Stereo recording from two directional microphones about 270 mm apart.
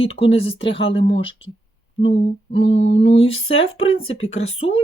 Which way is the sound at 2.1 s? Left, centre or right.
Left.